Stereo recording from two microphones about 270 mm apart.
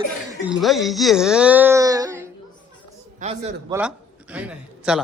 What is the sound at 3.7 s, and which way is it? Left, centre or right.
A man's voice, centre.